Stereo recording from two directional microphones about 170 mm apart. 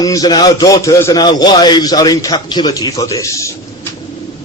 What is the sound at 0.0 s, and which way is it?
Speech, 20° left (ahead or behind).